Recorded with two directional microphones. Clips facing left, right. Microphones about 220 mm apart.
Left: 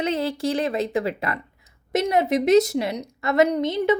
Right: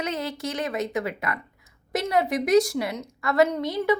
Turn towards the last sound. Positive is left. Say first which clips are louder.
# left 3 dB
turn(degrees=20)  # may be behind; listen again after turning